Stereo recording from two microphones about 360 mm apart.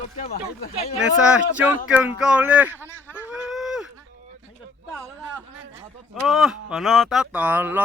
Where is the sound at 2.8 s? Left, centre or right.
Centre.